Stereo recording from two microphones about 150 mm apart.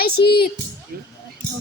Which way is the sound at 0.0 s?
90° left.